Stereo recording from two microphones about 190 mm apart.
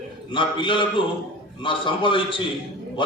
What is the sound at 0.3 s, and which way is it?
A man's voice, 25° left (ahead or behind).